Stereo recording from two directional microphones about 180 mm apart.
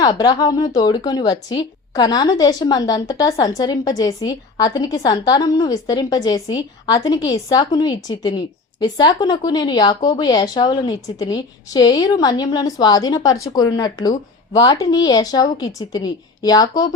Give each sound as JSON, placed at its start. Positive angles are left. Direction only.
{"t": 0.0, "sound": "a woman's voice", "side_deg": 20}